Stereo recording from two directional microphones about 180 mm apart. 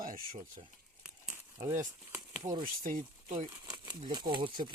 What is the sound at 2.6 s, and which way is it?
Speech, 50° right (ahead or behind).